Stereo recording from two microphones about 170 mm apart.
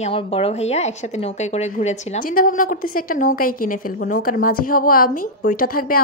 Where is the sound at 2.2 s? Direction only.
55° left (ahead or behind).